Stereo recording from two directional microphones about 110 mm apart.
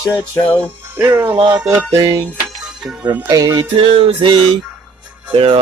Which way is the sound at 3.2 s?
35° right (ahead or behind).